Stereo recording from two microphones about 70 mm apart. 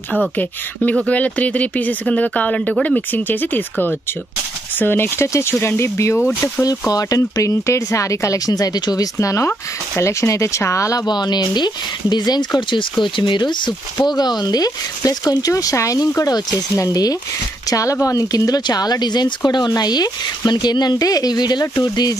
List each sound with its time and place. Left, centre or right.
1.0 s speech: centre; by 6.1 s left
6.9 s speech: left
11.1 s speech: left
16.2 s speech: left